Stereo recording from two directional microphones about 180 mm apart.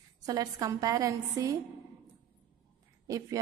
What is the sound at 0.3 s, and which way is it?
A woman's voice, 20° right (ahead or behind).